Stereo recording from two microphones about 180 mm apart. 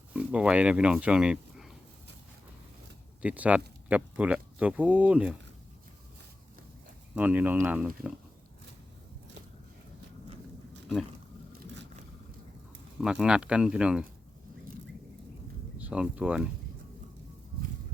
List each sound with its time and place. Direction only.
0.1 s speech: 5° right (ahead or behind)
3.2 s speech: 10° right (ahead or behind)
7.2 s speech: 10° right (ahead or behind)
11.5 s scrape: 80° right
13.0 s speech: 5° right (ahead or behind)
15.8 s speech: 5° right (ahead or behind)